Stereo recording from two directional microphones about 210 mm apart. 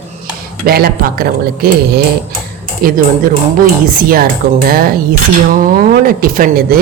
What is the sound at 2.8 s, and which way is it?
Speech, 40° right (ahead or behind).